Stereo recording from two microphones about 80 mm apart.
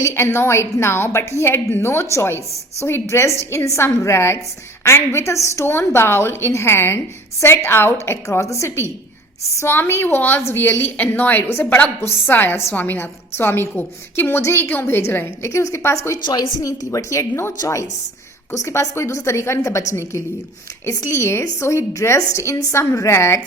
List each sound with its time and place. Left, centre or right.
0.0 s a woman's voice: left
16.2 s a woman's voice: left